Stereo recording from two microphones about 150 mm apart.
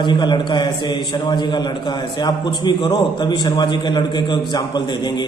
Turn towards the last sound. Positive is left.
turn(degrees=30)  # may be behind; listen again after turning